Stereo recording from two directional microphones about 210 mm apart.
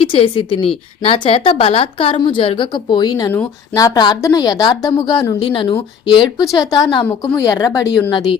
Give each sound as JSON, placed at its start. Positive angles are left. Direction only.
{"t": 0.0, "sound": "a woman's voice", "side_deg": 25}